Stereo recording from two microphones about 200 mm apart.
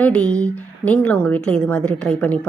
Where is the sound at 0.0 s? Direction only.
5° left (ahead or behind).